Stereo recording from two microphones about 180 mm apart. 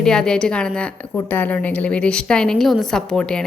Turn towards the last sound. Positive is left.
turn(degrees=5)  # may be behind; listen again after turning